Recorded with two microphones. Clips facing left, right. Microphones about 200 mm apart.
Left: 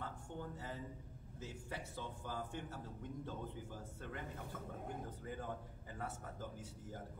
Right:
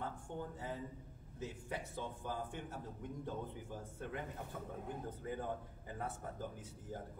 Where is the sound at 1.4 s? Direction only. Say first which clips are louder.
Right 4 dB; 20° right (ahead or behind).